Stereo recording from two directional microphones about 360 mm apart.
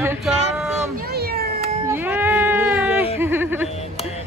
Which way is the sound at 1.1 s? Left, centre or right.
Right.